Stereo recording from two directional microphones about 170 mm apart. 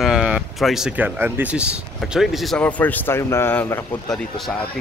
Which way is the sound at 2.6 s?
10° left (ahead or behind).